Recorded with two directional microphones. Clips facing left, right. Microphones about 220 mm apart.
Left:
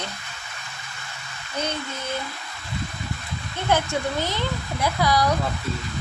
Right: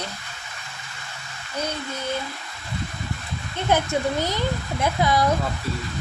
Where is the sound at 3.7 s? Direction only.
20° right (ahead or behind).